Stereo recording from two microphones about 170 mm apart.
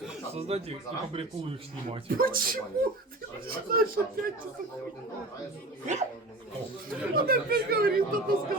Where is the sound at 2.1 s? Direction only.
60° right (ahead or behind).